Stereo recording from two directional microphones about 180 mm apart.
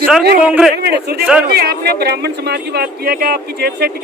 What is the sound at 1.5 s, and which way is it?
Speech, 60° right (ahead or behind).